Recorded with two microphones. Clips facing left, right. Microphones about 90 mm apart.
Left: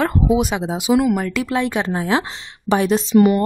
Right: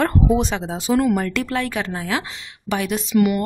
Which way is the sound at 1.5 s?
20° left (ahead or behind).